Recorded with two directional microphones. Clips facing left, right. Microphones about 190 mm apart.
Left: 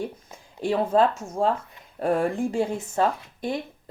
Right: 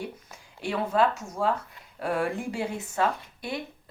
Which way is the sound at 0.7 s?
35° left (ahead or behind).